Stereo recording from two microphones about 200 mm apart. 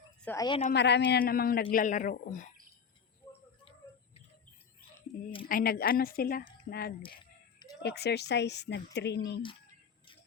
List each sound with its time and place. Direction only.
0.2 s a woman's voice: 10° left (ahead or behind)
0.4 s a woman's voice: 25° left (ahead or behind)
0.7 s speech: 60° left (ahead or behind); by 2.5 s 40° left (ahead or behind)
3.6 s bird: 25° left (ahead or behind)
5.1 s a woman's voice: 45° left (ahead or behind)